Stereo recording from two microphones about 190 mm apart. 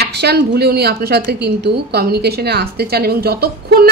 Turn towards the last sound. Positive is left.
turn(degrees=-55)  # may be behind; listen again after turning